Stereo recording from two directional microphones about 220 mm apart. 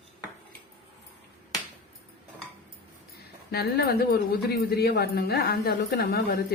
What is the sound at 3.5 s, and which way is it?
Speech, 45° left (ahead or behind).